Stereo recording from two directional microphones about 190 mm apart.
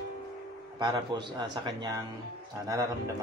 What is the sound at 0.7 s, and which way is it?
A man's voice, 25° right (ahead or behind).